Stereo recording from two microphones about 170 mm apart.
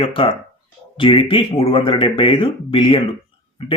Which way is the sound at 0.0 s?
30° left (ahead or behind).